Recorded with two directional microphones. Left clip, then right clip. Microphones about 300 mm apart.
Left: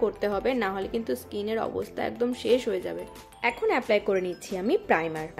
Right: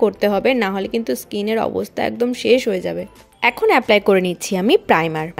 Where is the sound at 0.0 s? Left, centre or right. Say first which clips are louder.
Right 10 dB; right.